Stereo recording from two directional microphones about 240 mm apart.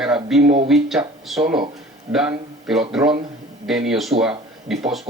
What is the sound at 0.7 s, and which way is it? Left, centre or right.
A man's voice, centre.